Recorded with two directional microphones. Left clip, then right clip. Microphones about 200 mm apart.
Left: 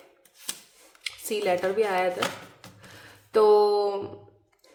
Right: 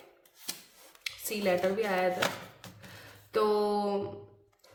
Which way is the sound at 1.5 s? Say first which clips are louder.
Left 3 dB; 35° left (ahead or behind).